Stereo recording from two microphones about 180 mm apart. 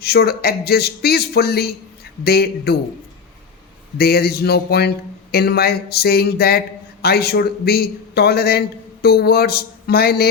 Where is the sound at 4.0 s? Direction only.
60° left (ahead or behind).